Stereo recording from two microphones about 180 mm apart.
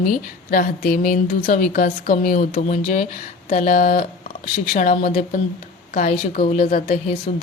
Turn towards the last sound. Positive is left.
turn(degrees=35)  # may be behind; listen again after turning